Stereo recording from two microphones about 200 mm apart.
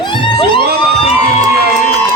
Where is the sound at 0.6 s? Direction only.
50° right (ahead or behind).